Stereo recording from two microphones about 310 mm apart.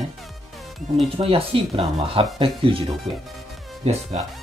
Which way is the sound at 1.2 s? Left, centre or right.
Centre.